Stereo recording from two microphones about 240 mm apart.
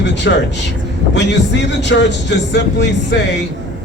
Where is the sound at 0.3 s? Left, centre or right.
Left.